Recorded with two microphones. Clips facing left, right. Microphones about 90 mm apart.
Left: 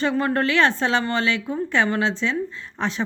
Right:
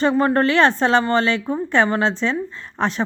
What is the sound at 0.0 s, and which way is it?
Speech, 35° right (ahead or behind).